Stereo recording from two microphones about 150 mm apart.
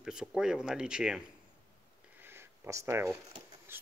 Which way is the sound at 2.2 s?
15° right (ahead or behind).